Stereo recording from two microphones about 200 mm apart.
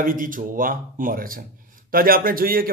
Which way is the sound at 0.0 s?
45° right (ahead or behind).